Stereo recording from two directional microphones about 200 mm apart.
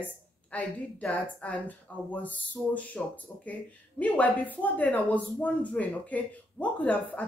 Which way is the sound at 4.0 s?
5° left (ahead or behind).